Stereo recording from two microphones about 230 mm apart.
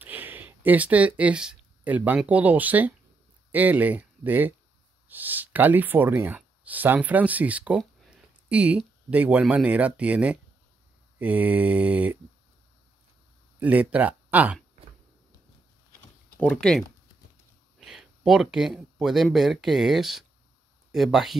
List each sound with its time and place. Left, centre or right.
0.0 s speech: centre
13.6 s speech: centre
16.3 s speech: centre